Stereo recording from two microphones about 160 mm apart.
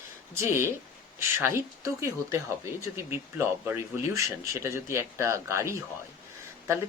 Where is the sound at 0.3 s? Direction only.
15° right (ahead or behind).